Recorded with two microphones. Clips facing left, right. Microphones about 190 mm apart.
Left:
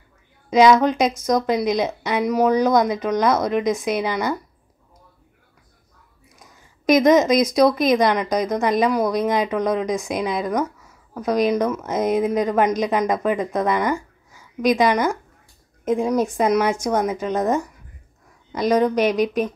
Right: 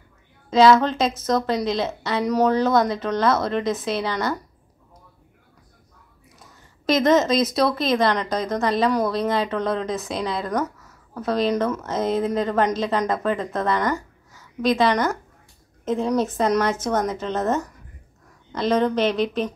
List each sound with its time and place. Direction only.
0.5 s speech: 15° left (ahead or behind)
6.4 s a sound: 15° left (ahead or behind)
7.5 s speech: 15° left (ahead or behind)